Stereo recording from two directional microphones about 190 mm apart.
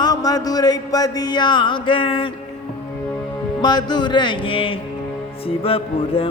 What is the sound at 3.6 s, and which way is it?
Music, 20° left (ahead or behind).